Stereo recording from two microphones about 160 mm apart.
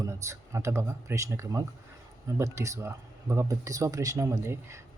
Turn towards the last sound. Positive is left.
turn(degrees=-20)  # may be behind; listen again after turning